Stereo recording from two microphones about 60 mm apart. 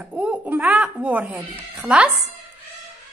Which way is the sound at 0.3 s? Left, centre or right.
Right.